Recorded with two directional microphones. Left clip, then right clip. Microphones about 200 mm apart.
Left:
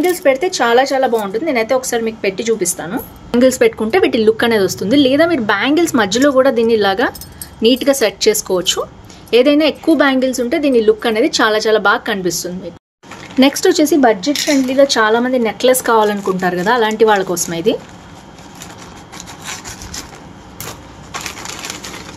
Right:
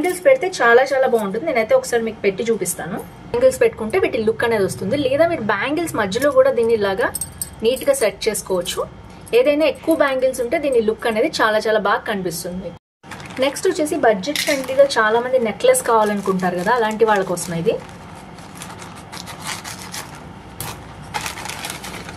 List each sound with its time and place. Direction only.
0.0 s a woman's voice: 50° left (ahead or behind)